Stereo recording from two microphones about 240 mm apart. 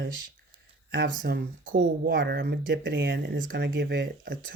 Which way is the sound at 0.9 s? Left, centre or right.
Right.